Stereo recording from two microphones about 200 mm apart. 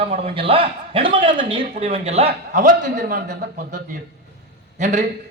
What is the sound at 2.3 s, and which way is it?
A man's voice, 45° right (ahead or behind).